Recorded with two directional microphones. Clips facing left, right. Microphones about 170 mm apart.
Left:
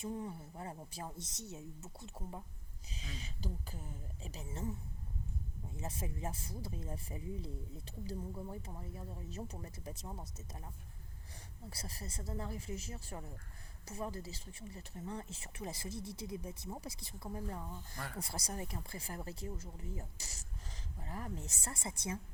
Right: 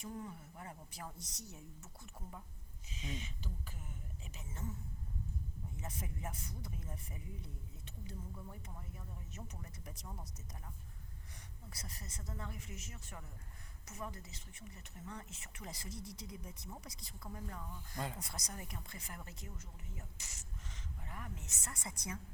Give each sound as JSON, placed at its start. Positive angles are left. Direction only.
{"t": 0.0, "sound": "speech", "side_deg": 25}
{"t": 11.7, "sound": "speech", "side_deg": 30}
{"t": 17.9, "sound": "speech", "side_deg": -20}
{"t": 18.2, "sound": "speech", "side_deg": 30}